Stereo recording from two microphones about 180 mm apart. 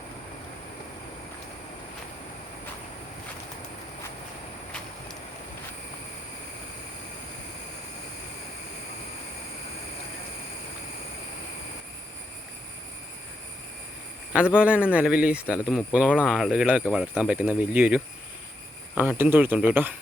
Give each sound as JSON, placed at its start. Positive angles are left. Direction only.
{"t": 14.5, "sound": "speech", "side_deg": -5}